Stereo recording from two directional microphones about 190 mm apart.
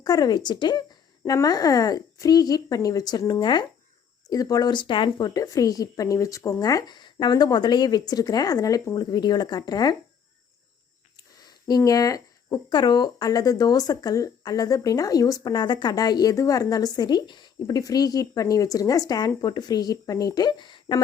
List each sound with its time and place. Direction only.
0.0 s speech: 20° left (ahead or behind)
11.7 s speech: 20° left (ahead or behind)